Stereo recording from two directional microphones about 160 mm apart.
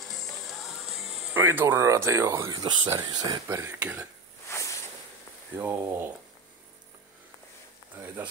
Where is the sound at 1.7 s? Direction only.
20° right (ahead or behind).